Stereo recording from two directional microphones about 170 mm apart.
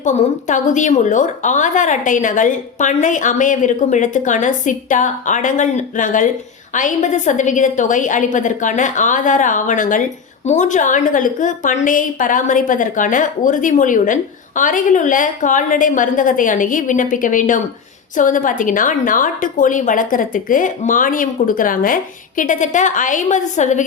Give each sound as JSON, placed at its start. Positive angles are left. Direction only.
{"t": 0.0, "sound": "a woman's voice", "side_deg": 45}